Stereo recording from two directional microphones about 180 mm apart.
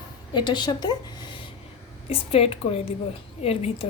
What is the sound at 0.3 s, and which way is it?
A woman's voice, 25° left (ahead or behind).